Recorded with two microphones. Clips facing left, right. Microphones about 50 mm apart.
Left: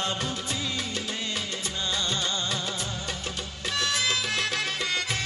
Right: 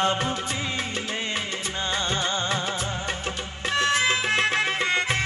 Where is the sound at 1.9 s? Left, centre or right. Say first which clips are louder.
Right 4 dB; right.